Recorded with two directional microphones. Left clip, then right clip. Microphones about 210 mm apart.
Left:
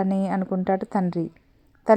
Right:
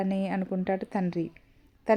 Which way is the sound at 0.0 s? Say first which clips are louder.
Left 5 dB; 20° left (ahead or behind).